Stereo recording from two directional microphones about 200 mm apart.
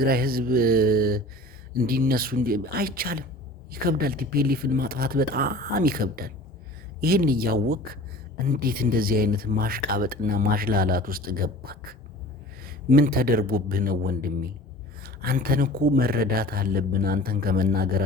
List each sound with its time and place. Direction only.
0.0 s speech: 50° right (ahead or behind)